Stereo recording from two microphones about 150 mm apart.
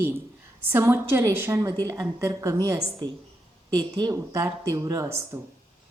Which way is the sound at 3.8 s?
25° right (ahead or behind).